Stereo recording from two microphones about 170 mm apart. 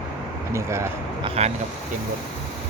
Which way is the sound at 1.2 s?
40° right (ahead or behind).